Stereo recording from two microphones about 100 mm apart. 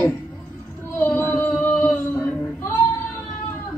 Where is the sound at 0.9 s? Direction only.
20° left (ahead or behind).